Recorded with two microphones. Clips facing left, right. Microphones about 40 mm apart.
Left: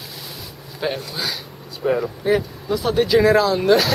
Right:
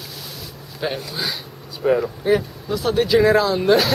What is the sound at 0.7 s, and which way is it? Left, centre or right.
Speech, centre.